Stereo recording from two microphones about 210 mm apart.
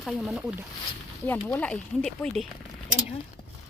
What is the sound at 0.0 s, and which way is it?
Speech, centre (ahead or behind).